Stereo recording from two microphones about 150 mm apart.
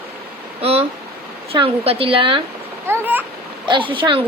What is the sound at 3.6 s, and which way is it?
Speech, 35° right (ahead or behind).